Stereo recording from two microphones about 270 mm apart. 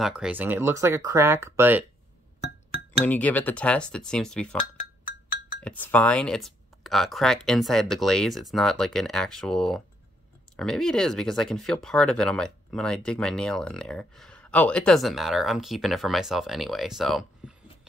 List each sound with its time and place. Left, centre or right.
0.0 s speech: centre
3.1 s speech: centre
5.6 s speech: centre